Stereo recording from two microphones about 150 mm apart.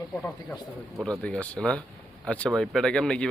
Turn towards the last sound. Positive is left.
turn(degrees=5)  # may be behind; listen again after turning